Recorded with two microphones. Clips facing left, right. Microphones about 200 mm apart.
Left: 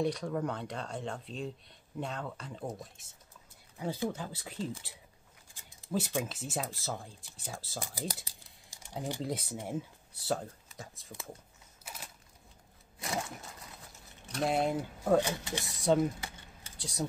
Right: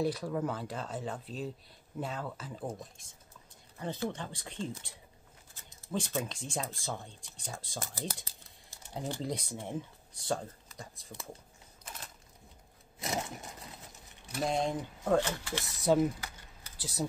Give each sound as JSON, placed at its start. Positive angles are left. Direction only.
{"t": 0.0, "sound": "speech", "side_deg": -5}
{"t": 8.1, "sound": "typing", "side_deg": 15}
{"t": 9.2, "sound": "speech", "side_deg": 5}
{"t": 11.8, "sound": "a sound", "side_deg": 10}
{"t": 13.0, "sound": "a sound", "side_deg": -20}
{"t": 14.3, "sound": "speech", "side_deg": 5}
{"t": 15.6, "sound": "speech", "side_deg": 0}
{"t": 16.2, "sound": "typing", "side_deg": 25}
{"t": 16.7, "sound": "typing", "side_deg": -5}